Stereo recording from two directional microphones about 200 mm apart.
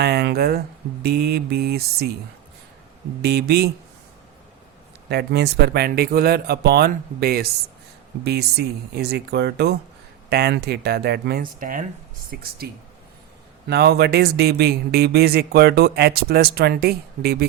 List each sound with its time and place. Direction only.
0.0 s speech: 55° right (ahead or behind)
3.2 s speech: 55° right (ahead or behind)
5.0 s speech: 55° right (ahead or behind)
13.7 s speech: 55° right (ahead or behind)